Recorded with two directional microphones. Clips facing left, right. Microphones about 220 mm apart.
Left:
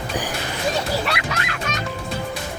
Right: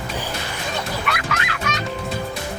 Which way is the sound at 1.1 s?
30° left (ahead or behind).